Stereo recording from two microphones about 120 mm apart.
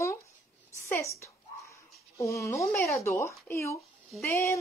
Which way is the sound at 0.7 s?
25° left (ahead or behind).